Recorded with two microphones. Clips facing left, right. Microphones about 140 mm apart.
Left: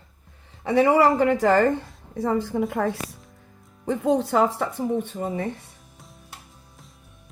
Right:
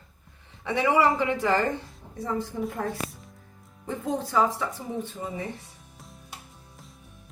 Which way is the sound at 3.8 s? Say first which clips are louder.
Left 8 dB; 70° left (ahead or behind).